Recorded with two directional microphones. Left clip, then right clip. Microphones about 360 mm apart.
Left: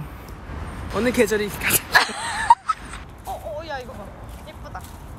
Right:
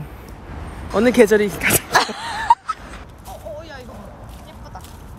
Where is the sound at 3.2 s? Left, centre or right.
Centre.